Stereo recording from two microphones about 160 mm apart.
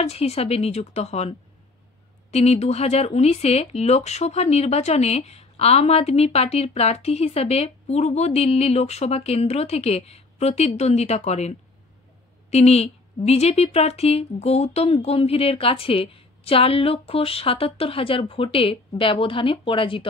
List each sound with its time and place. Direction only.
0.0 s speech: 40° left (ahead or behind)
2.3 s speech: 40° left (ahead or behind)